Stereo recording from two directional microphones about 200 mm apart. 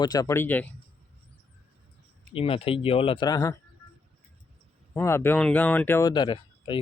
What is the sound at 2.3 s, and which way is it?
Speech, 25° left (ahead or behind).